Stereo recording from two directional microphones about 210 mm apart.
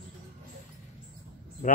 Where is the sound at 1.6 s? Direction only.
40° left (ahead or behind).